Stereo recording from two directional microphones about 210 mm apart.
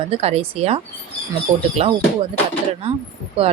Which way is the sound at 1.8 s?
30° right (ahead or behind).